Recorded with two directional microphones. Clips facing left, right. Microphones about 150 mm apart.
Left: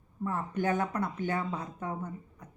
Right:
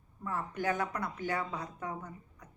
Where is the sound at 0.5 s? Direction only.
25° left (ahead or behind).